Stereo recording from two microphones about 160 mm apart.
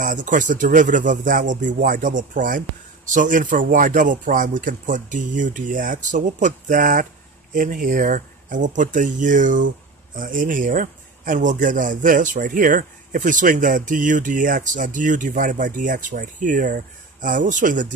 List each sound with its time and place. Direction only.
0.0 s speech: 55° right (ahead or behind)